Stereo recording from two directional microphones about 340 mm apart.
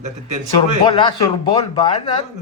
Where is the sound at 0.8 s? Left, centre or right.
Centre.